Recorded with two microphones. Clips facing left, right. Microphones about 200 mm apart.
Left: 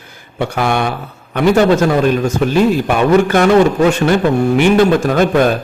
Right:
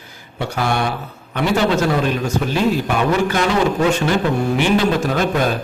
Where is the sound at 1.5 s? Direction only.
45° left (ahead or behind).